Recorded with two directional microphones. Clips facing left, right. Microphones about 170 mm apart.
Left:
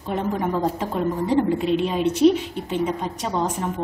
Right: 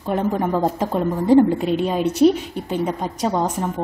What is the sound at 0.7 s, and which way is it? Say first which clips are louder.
A woman's voice: right 3 dB; 40° right (ahead or behind).